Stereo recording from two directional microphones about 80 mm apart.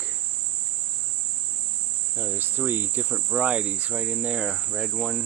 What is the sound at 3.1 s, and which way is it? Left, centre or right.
Insect, centre.